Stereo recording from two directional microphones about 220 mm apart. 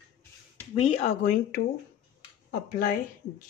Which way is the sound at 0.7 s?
25° left (ahead or behind).